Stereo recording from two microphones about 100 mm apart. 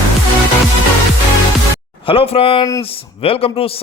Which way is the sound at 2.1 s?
70° left (ahead or behind).